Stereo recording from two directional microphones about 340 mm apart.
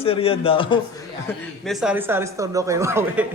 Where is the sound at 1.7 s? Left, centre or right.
Centre.